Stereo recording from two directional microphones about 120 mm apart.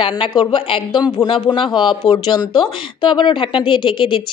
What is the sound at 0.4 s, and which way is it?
Speech, 40° left (ahead or behind).